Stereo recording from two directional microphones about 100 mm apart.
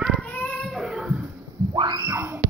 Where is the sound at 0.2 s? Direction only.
15° left (ahead or behind).